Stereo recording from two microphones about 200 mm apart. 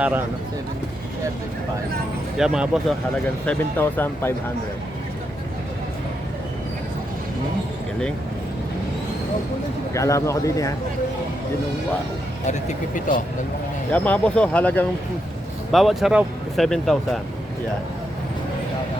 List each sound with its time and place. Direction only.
0.0 s speech: 10° right (ahead or behind)
2.4 s speech: 5° right (ahead or behind)
3.4 s speech: 10° left (ahead or behind)
9.9 s speech: 15° left (ahead or behind)
12.5 s speech: 40° left (ahead or behind)
13.9 s speech: 10° left (ahead or behind)